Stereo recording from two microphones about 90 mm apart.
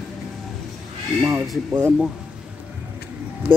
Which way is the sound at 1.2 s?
25° right (ahead or behind).